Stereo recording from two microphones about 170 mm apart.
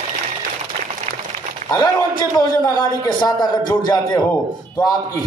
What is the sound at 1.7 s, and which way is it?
A man's voice, 20° left (ahead or behind).